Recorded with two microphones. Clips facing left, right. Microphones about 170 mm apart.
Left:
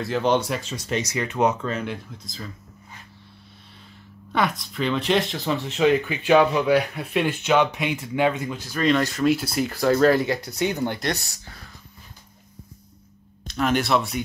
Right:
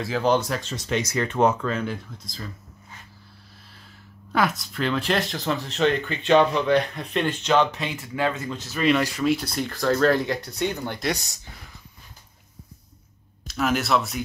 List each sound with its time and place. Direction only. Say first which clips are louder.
0.0 s speech: even; centre (ahead or behind)
4.3 s speech: even; centre (ahead or behind); by 8.5 s 15° left (ahead or behind)
8.6 s speech: even; 10° right (ahead or behind); by 11.0 s 10° left (ahead or behind)
11.1 s speech: left 2 dB; 15° right (ahead or behind)
13.5 s speech: left 1 dB; 5° right (ahead or behind)